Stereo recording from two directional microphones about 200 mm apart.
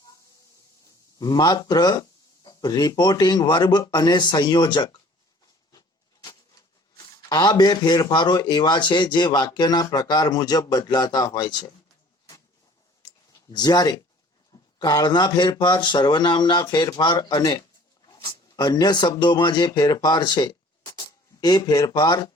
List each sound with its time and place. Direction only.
1.2 s speech: 20° left (ahead or behind)
7.0 s speech: 20° left (ahead or behind)
13.5 s speech: 20° left (ahead or behind)